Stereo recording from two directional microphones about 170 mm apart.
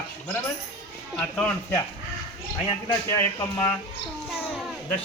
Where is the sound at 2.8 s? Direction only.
20° left (ahead or behind).